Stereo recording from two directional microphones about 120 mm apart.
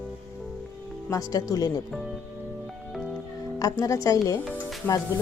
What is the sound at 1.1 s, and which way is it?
Speech, 30° left (ahead or behind).